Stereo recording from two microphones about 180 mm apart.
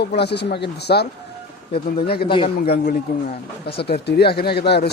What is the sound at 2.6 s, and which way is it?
Speech, 60° left (ahead or behind).